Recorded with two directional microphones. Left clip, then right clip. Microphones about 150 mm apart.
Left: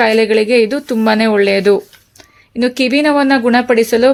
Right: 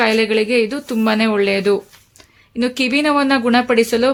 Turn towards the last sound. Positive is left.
turn(degrees=15)  # may be behind; listen again after turning